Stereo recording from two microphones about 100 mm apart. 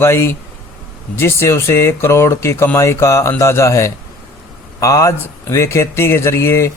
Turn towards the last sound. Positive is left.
turn(degrees=30)  # may be behind; listen again after turning